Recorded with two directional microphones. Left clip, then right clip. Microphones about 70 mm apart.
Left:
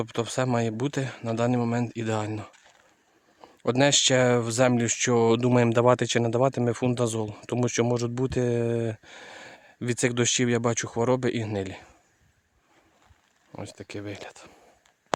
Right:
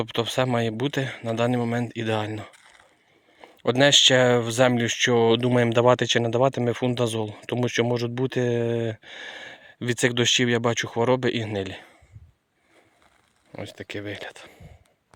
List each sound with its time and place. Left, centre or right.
0.0 s speech: centre
3.4 s speech: left
13.6 s speech: centre